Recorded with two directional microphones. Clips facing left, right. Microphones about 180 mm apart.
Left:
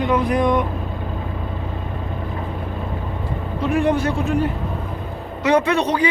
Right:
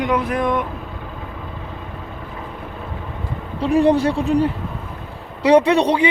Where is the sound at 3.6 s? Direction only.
35° right (ahead or behind).